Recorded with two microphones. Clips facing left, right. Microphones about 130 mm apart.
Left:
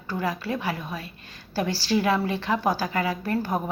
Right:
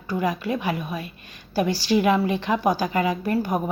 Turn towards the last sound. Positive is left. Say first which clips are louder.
# right 3 dB
turn(degrees=-20)  # may be behind; listen again after turning